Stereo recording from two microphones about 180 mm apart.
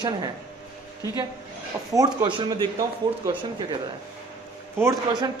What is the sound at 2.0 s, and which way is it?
Speech, 20° right (ahead or behind).